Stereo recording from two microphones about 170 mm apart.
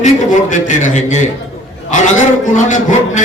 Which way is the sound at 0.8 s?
45° left (ahead or behind).